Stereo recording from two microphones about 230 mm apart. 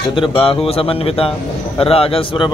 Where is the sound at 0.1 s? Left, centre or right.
Left.